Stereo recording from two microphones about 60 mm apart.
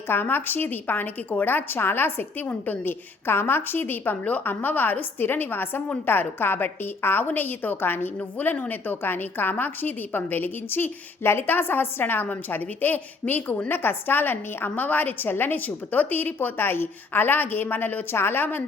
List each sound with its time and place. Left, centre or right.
0.1 s a woman's voice: left